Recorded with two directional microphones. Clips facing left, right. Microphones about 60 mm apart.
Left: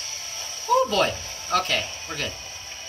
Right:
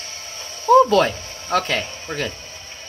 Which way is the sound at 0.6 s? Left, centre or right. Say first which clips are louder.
Right 7 dB; right.